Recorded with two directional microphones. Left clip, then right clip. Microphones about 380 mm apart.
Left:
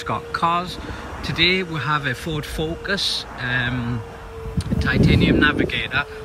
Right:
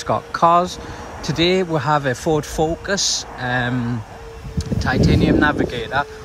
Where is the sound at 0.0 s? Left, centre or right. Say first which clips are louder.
Right 5 dB; centre.